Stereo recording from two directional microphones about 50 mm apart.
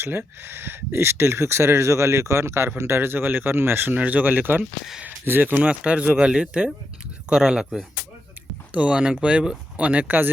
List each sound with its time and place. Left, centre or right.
0.0 s speech: right
3.9 s speech: right
5.5 s speech: right
8.7 s speech: right
9.7 s speech: right